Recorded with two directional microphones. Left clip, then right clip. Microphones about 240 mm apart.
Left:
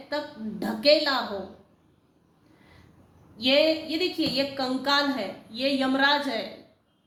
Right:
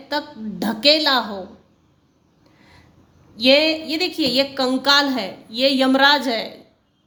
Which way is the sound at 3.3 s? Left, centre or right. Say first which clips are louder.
Right 6 dB; right.